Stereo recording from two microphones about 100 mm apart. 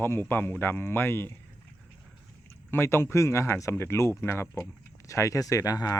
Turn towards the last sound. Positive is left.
turn(degrees=40)  # may be behind; listen again after turning